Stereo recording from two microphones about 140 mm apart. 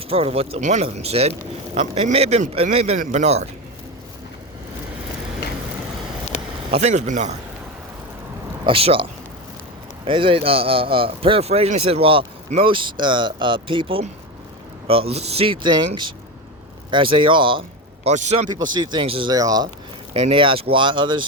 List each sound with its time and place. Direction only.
0.1 s speech: 45° right (ahead or behind)
3.0 s a man's voice: 60° right (ahead or behind)
6.3 s a sound: 55° left (ahead or behind)
6.7 s speech: 55° right (ahead or behind)
8.6 s speech: 40° right (ahead or behind)
10.1 s speech: 40° right (ahead or behind)
16.9 s speech: 35° right (ahead or behind)
18.0 s speech: 55° right (ahead or behind)
18.4 s speech: 30° right (ahead or behind)
19.3 s speech: 25° right (ahead or behind)
20.1 s speech: 40° right (ahead or behind)